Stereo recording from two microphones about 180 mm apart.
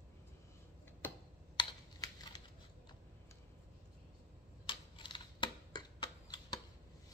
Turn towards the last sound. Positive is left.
turn(degrees=25)  # may be behind; listen again after turning